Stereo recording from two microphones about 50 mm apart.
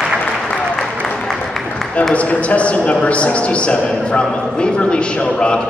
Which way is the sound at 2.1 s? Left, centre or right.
Left.